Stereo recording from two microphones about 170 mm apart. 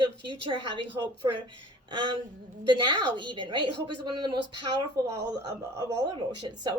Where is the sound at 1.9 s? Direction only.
25° right (ahead or behind).